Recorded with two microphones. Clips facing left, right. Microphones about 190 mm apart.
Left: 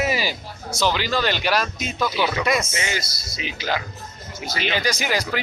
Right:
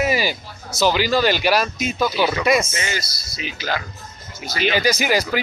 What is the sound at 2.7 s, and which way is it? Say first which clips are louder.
Speech: even; 15° left (ahead or behind).